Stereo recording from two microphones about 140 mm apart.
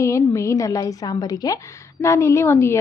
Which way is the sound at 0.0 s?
20° left (ahead or behind).